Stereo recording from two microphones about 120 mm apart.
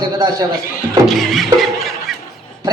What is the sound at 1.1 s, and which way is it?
Music, centre (ahead or behind).